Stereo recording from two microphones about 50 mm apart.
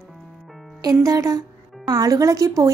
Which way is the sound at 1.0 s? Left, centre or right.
Right.